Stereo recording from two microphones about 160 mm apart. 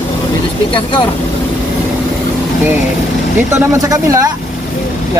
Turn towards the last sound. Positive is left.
turn(degrees=-20)  # may be behind; listen again after turning